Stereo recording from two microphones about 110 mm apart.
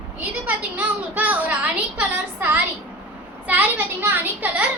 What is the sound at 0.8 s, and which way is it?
A child's voice, 15° right (ahead or behind).